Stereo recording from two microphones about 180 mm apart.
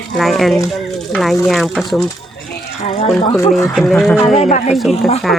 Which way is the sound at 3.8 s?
5° left (ahead or behind).